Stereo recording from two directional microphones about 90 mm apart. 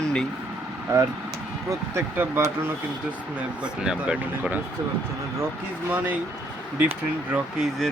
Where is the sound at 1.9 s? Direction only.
20° right (ahead or behind).